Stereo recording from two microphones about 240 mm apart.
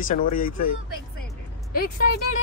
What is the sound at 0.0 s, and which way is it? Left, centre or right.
Speech, left.